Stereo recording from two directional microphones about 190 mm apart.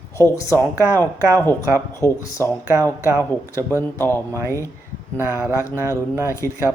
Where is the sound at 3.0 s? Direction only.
15° right (ahead or behind).